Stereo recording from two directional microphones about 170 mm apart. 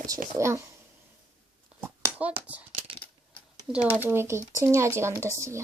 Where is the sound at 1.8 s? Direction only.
10° right (ahead or behind).